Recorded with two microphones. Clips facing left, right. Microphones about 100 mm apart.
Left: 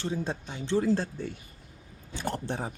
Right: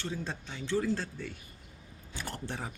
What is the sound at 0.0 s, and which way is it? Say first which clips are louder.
Speech: left 6 dB; 20° left (ahead or behind).